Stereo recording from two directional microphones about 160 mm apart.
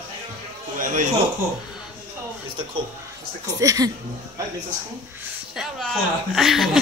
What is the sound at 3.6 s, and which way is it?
Speech, 20° right (ahead or behind).